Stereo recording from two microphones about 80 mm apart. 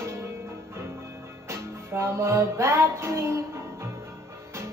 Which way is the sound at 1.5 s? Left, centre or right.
Right.